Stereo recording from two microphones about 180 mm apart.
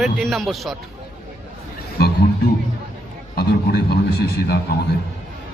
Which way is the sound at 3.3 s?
60° left (ahead or behind).